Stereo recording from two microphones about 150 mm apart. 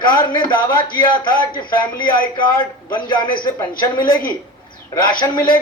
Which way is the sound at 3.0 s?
30° left (ahead or behind).